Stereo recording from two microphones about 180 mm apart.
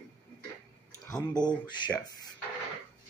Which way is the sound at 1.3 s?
25° left (ahead or behind).